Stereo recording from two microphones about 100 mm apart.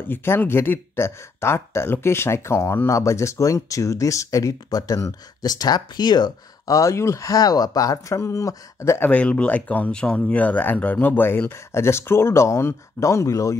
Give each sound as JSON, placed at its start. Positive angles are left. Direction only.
{"t": 0.0, "sound": "speech", "side_deg": 20}
{"t": 6.8, "sound": "speech", "side_deg": 30}
{"t": 9.1, "sound": "speech", "side_deg": 15}